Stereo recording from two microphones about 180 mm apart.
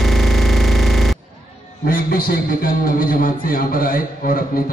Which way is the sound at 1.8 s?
55° left (ahead or behind).